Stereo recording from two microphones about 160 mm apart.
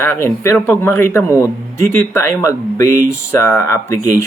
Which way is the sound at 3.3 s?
15° left (ahead or behind).